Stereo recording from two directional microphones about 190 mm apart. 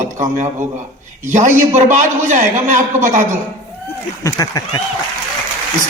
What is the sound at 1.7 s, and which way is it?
Speech, 40° right (ahead or behind).